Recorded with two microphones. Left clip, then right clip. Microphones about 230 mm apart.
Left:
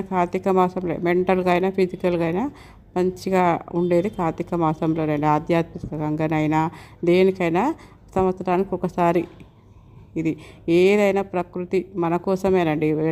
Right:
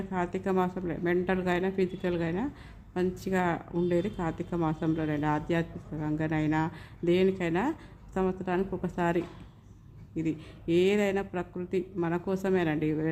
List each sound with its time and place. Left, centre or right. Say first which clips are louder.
0.1 s a woman's voice: left 10 dB; left